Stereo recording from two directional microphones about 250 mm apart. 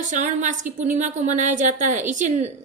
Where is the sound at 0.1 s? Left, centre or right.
Right.